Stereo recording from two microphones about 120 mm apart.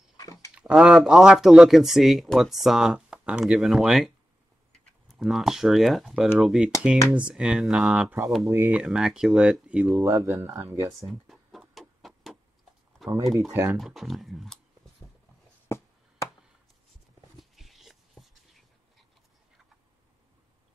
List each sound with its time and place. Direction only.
0.2 s a sound: 25° left (ahead or behind)
0.6 s speech: 5° right (ahead or behind)
9.9 s speech: 25° right (ahead or behind)
11.1 s a sound: centre (ahead or behind)
13.0 s speech: centre (ahead or behind)
13.5 s speech: 20° right (ahead or behind)
13.7 s speech: centre (ahead or behind)
15.7 s a sound: 20° left (ahead or behind)
17.4 s dog: centre (ahead or behind)